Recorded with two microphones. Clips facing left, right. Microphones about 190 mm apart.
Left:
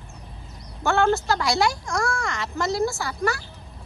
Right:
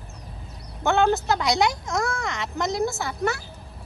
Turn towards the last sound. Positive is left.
turn(degrees=-20)  # may be behind; listen again after turning